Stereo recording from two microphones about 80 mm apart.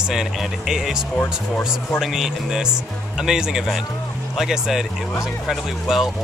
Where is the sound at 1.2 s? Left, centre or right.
Left.